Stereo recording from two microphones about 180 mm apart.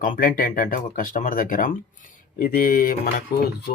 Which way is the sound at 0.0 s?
50° left (ahead or behind).